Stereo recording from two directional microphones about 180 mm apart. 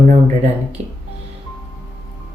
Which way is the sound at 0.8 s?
40° right (ahead or behind).